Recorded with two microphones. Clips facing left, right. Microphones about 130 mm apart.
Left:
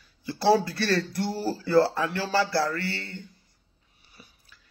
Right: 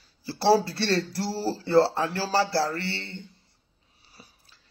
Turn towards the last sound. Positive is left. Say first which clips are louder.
# even
turn(degrees=-35)  # may be behind; listen again after turning